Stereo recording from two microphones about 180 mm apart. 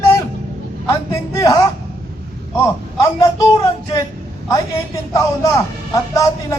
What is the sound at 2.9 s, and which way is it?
Speech, 20° left (ahead or behind).